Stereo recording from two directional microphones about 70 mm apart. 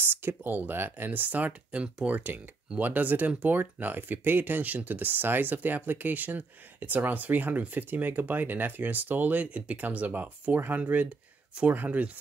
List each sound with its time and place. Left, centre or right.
0.0 s speech: right